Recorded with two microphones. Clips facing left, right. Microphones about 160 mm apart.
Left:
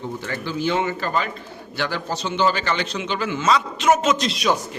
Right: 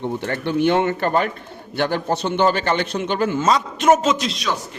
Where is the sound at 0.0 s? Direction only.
65° right (ahead or behind); by 4.0 s 45° right (ahead or behind).